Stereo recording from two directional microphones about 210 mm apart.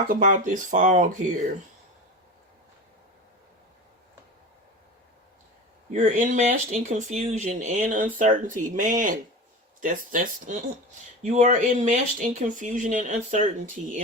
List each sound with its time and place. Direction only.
0.1 s speech: 40° right (ahead or behind)
5.9 s speech: 35° right (ahead or behind)